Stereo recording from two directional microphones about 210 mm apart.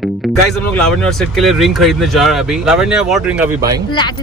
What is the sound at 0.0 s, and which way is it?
Speech, centre (ahead or behind).